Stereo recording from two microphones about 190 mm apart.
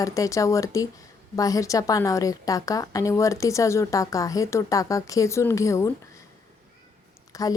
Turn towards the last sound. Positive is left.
turn(degrees=20)  # may be behind; listen again after turning